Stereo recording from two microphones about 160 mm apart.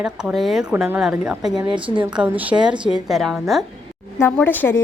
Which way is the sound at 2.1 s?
10° right (ahead or behind).